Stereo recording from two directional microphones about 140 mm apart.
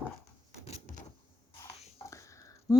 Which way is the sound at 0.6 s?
50° left (ahead or behind).